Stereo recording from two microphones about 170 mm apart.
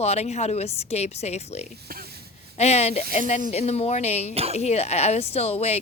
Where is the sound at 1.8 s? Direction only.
65° right (ahead or behind).